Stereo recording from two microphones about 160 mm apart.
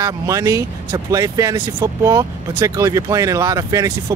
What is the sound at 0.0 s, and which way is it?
Speech, 20° right (ahead or behind).